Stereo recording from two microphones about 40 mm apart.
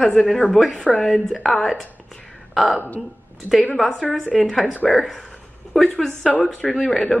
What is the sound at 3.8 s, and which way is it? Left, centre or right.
A man's voice, centre.